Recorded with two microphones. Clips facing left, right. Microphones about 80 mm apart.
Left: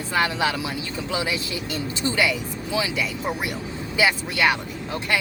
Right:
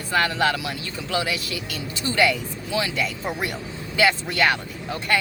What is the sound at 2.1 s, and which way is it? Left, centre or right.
Speech, centre.